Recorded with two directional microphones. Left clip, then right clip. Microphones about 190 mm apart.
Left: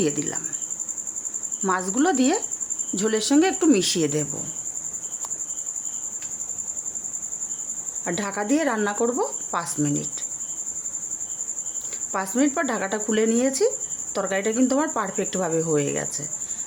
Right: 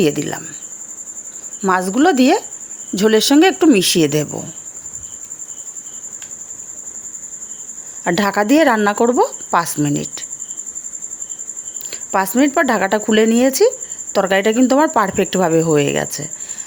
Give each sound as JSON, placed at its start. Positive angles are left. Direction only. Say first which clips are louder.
{"t": 0.0, "sound": "speech", "louder": "right 8 dB", "side_deg": -30}
{"t": 1.6, "sound": "speech", "louder": "right 8 dB", "side_deg": -30}
{"t": 8.0, "sound": "speech", "louder": "right 12 dB", "side_deg": -40}
{"t": 12.1, "sound": "speech", "louder": "right 9 dB", "side_deg": -35}